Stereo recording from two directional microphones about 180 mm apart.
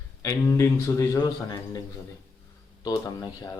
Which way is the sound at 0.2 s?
15° left (ahead or behind).